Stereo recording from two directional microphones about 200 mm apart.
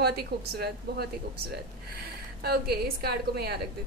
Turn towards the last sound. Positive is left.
turn(degrees=-50)  # may be behind; listen again after turning